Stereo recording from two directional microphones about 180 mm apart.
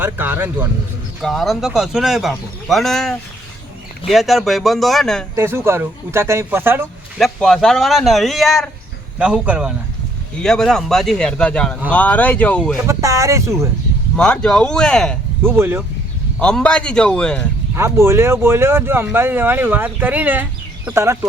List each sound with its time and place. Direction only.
0.0 s speech: 10° right (ahead or behind)
1.2 s speech: centre (ahead or behind)
5.3 s speech: 15° right (ahead or behind)
7.2 s speech: centre (ahead or behind)
12.9 s speech: 15° right (ahead or behind)
14.2 s speech: 5° left (ahead or behind)
15.4 s speech: 10° right (ahead or behind)
16.4 s speech: 5° left (ahead or behind)
17.7 s speech: 15° right (ahead or behind)